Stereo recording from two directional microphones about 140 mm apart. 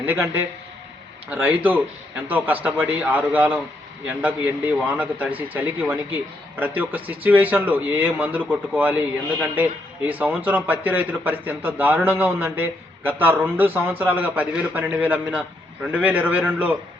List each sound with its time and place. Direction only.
0.0 s a man's voice: 15° right (ahead or behind)
10.1 s a man's voice: 10° right (ahead or behind)